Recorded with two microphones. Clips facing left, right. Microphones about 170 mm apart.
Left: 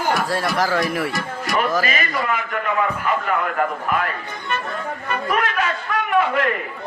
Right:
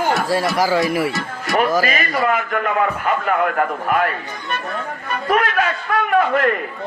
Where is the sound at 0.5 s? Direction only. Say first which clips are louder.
Right 3 dB; centre (ahead or behind).